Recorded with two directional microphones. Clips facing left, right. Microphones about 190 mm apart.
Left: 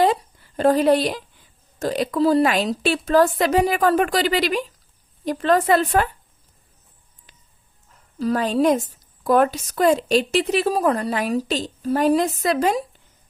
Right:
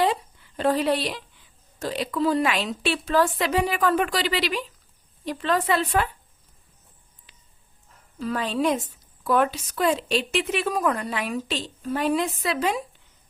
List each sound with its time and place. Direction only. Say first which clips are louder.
0.0 s a sound: left 5 dB; 40° left (ahead or behind)
1.8 s a woman's voice: left 5 dB; 45° left (ahead or behind)
8.2 s a woman's voice: left 6 dB; 40° left (ahead or behind)